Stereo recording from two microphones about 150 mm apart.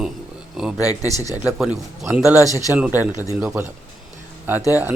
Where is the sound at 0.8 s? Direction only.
20° left (ahead or behind).